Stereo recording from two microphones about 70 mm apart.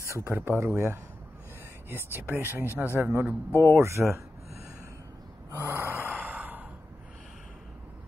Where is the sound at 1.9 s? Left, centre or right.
Right.